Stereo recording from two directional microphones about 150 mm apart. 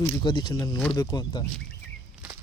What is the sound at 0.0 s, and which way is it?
Speech, 30° left (ahead or behind).